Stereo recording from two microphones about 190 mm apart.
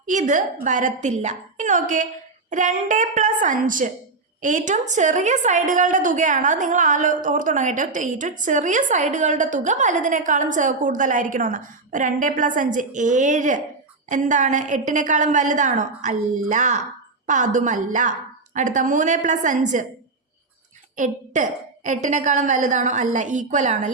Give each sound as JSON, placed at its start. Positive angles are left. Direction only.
{"t": 0.0, "sound": "a woman's voice", "side_deg": -40}
{"t": 20.9, "sound": "a woman's voice", "side_deg": -40}